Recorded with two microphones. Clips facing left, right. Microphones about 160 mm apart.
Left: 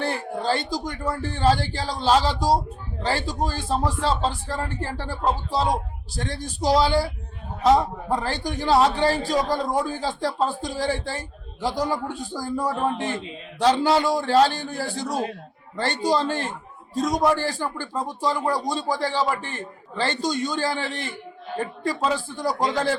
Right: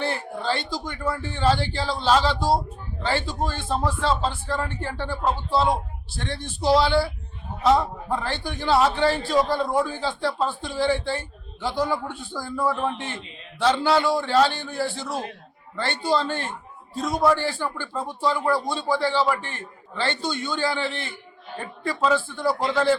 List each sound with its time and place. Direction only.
0.0 s a man's voice: 40° left (ahead or behind)